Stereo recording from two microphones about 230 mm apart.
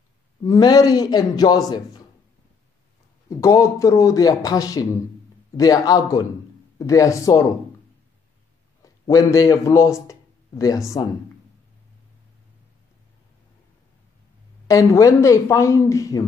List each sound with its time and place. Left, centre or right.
0.4 s a man's voice: centre
3.3 s a man's voice: centre
8.8 s a man's voice: centre
14.7 s a man's voice: centre